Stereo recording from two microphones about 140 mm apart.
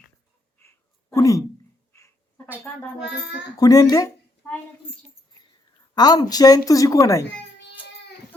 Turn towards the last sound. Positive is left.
turn(degrees=25)  # may be behind; listen again after turning